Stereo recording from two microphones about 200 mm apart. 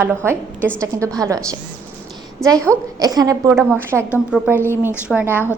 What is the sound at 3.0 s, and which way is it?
A woman's voice, 20° right (ahead or behind).